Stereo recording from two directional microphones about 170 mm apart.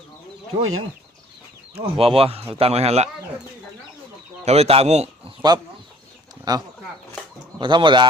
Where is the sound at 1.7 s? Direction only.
35° right (ahead or behind).